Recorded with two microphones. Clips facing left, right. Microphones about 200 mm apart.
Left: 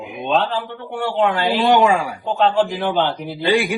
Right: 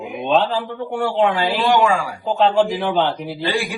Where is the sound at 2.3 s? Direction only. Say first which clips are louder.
Right 1 dB; centre (ahead or behind).